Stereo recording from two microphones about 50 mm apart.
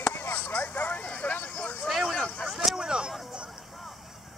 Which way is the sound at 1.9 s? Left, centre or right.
Centre.